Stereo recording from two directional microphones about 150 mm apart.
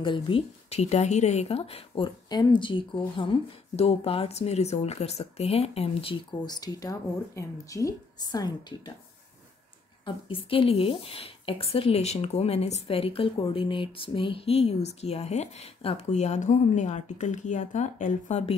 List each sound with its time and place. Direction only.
0.0 s a woman's voice: 35° left (ahead or behind)
10.0 s a woman's voice: 35° left (ahead or behind); by 18.5 s 50° left (ahead or behind)